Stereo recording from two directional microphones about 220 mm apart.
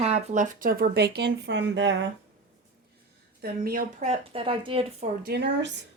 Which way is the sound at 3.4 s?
45° right (ahead or behind).